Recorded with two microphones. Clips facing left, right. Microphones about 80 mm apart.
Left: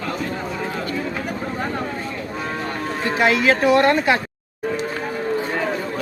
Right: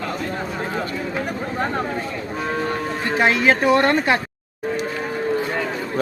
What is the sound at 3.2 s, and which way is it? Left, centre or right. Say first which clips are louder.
Speech: even; right.